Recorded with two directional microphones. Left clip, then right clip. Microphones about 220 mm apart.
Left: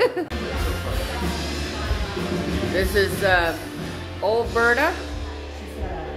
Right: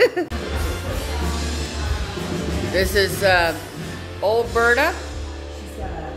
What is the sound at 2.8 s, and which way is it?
Speech, 15° right (ahead or behind).